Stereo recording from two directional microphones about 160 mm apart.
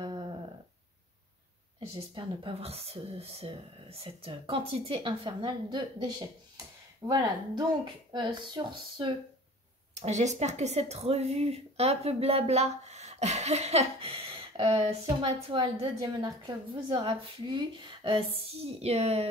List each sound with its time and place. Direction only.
0.0 s dog: 30° right (ahead or behind)
2.0 s speech: 35° right (ahead or behind)
9.9 s speech: 45° right (ahead or behind)